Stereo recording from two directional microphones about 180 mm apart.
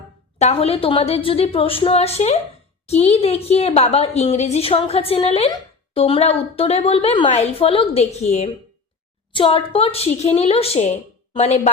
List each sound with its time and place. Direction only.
0.3 s speech: 35° left (ahead or behind)